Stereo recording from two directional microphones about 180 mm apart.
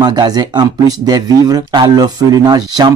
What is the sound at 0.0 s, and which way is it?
Speech, 20° right (ahead or behind).